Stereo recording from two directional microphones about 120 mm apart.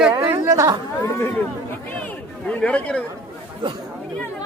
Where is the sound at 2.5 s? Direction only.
10° left (ahead or behind).